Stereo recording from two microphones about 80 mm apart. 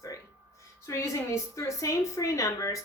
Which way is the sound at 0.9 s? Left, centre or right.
Left.